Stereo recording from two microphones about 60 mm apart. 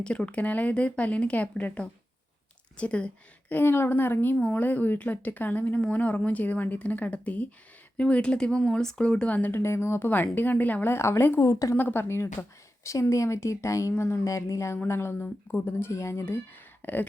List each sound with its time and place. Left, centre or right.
0.0 s speech: centre
3.5 s a woman's voice: left
9.5 s speech: left
10.9 s speech: left
11.3 s speech: left
11.8 s speech: left
13.9 s speech: left
14.3 s speech: left
16.8 s speech: left